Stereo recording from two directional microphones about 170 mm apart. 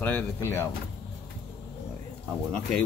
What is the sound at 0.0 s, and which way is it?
Speech, 10° left (ahead or behind).